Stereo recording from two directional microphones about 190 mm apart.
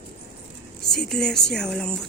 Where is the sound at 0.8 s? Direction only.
5° left (ahead or behind).